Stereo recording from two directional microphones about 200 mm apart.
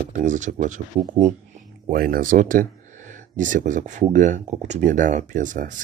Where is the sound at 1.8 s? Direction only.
45° right (ahead or behind).